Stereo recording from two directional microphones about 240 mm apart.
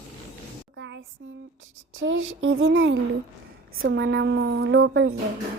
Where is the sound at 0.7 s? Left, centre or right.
Right.